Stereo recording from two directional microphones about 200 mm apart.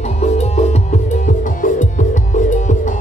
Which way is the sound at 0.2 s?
35° left (ahead or behind).